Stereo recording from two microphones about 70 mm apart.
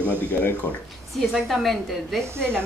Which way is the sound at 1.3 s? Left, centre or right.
Centre.